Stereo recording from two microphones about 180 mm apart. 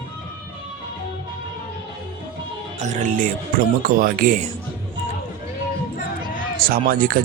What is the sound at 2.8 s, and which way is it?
Speech, 40° right (ahead or behind).